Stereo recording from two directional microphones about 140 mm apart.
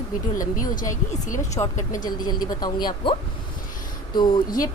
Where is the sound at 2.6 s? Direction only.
30° left (ahead or behind).